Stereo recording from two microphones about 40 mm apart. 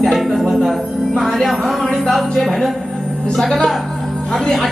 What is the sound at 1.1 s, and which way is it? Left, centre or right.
A woman's voice, centre.